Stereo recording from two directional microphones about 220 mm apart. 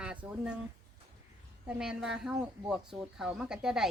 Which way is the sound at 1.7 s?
5° right (ahead or behind).